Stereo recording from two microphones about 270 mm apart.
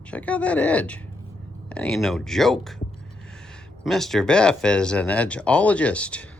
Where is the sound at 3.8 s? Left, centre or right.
Centre.